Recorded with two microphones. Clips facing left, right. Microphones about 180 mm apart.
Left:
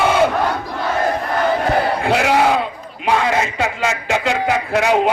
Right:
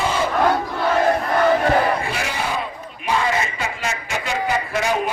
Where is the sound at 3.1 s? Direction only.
75° left (ahead or behind).